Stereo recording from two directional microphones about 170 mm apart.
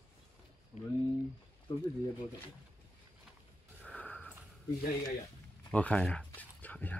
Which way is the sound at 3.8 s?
10° left (ahead or behind).